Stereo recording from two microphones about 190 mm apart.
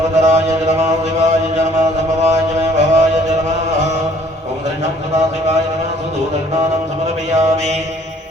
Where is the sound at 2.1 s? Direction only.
35° right (ahead or behind).